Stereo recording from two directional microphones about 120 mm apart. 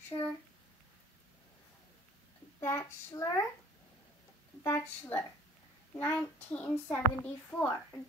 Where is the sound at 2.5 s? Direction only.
25° left (ahead or behind).